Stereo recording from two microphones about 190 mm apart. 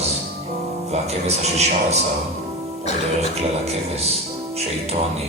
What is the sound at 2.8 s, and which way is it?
Speech, 35° left (ahead or behind).